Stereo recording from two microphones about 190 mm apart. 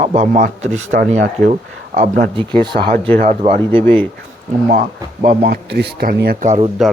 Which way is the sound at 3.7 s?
10° left (ahead or behind).